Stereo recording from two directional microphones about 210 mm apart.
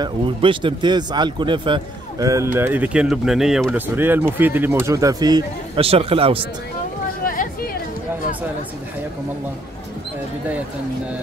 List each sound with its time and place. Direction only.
0.0 s speech: 25° right (ahead or behind)
7.2 s hubbub: 40° left (ahead or behind)